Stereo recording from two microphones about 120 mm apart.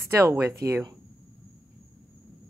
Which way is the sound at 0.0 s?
25° right (ahead or behind).